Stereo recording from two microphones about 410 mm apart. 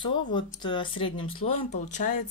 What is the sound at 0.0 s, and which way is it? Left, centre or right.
Speech, centre.